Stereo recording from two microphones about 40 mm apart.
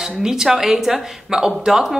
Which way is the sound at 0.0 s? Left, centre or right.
Centre.